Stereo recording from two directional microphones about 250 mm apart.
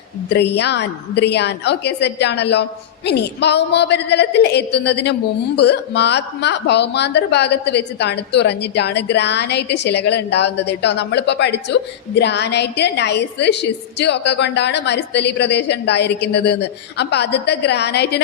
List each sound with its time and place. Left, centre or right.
0.3 s speech: left